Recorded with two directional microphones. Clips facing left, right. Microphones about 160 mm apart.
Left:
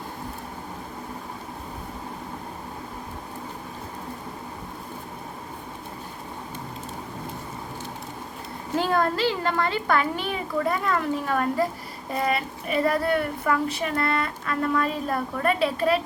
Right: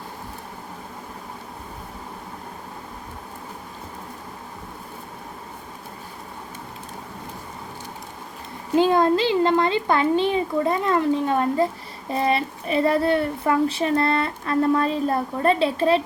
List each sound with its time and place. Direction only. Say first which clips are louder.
8.7 s a woman's voice: right 6 dB; 20° right (ahead or behind)